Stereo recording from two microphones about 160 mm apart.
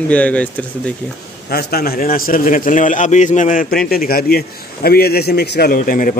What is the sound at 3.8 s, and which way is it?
A man's voice, 70° left (ahead or behind).